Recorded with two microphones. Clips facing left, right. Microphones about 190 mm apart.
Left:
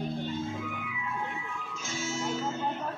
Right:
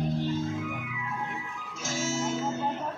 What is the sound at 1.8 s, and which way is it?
Music, 85° right.